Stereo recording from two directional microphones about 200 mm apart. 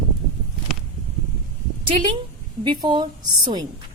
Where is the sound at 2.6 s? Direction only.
25° right (ahead or behind).